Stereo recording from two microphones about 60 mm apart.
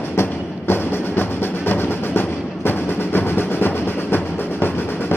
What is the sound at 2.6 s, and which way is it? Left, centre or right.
Train, left.